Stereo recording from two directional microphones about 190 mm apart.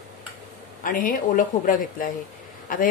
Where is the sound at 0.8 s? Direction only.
45° left (ahead or behind).